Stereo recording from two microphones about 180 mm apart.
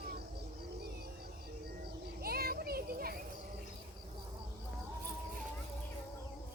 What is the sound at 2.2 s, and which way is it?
Children playing, 55° right (ahead or behind).